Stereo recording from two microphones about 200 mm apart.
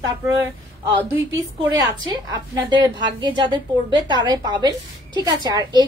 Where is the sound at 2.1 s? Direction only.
20° right (ahead or behind).